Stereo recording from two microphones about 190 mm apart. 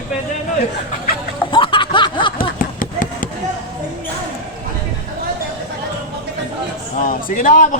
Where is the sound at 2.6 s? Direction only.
45° left (ahead or behind).